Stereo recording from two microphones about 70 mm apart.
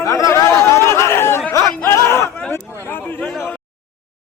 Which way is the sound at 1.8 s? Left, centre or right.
Left.